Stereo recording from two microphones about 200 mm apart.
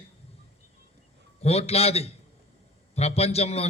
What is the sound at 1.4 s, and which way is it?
A man's voice, 30° left (ahead or behind).